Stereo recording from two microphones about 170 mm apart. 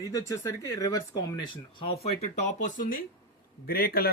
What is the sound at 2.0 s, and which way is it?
A man's voice, 45° left (ahead or behind).